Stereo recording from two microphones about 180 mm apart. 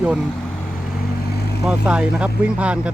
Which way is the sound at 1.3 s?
60° left (ahead or behind).